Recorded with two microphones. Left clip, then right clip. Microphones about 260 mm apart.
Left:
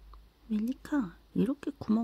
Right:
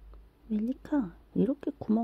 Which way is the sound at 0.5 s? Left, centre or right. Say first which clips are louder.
Right 2 dB; left.